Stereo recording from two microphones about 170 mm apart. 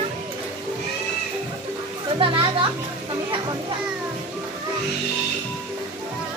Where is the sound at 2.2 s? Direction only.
30° right (ahead or behind).